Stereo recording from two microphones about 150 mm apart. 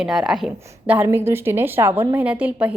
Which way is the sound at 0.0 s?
5° right (ahead or behind).